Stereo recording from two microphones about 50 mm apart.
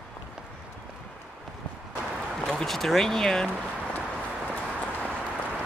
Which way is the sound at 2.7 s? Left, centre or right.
Centre.